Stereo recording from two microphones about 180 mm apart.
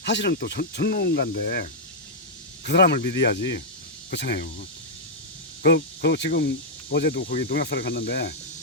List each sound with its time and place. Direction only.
0.0 s speech: 70° left (ahead or behind)
2.6 s speech: 65° left (ahead or behind)
5.6 s speech: 65° left (ahead or behind)